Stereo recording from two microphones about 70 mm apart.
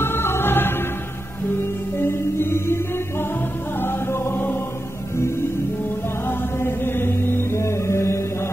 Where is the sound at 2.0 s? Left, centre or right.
Left.